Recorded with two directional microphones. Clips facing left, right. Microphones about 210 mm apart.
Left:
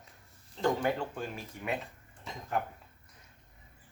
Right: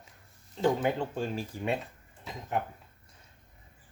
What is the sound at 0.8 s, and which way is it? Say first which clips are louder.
Speech: right 2 dB; 20° right (ahead or behind).